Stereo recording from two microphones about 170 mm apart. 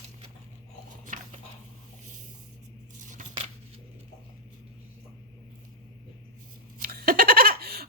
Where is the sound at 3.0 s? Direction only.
50° right (ahead or behind).